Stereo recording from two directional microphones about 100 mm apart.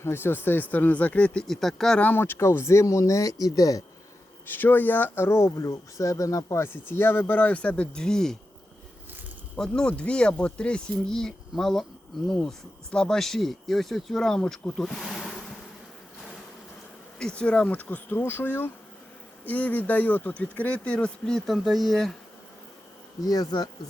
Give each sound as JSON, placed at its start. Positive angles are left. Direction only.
{"t": 0.0, "sound": "speech", "side_deg": 25}
{"t": 2.0, "sound": "speech", "side_deg": 20}
{"t": 4.4, "sound": "speech", "side_deg": 20}
{"t": 9.6, "sound": "speech", "side_deg": 10}
{"t": 17.2, "sound": "speech", "side_deg": 10}
{"t": 23.2, "sound": "speech", "side_deg": 40}